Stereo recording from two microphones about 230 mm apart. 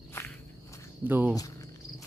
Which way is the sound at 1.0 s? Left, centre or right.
Centre.